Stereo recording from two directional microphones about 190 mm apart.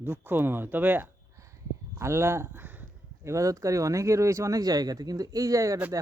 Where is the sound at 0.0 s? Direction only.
10° right (ahead or behind).